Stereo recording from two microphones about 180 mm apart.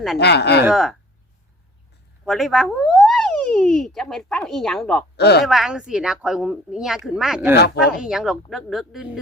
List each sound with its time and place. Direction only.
0.2 s speech: 70° left (ahead or behind)
0.7 s speech: centre (ahead or behind)
2.2 s speech: centre (ahead or behind)
5.1 s speech: 65° left (ahead or behind)
5.4 s speech: centre (ahead or behind)
7.5 s speech: 65° left (ahead or behind)
8.0 s speech: 5° right (ahead or behind)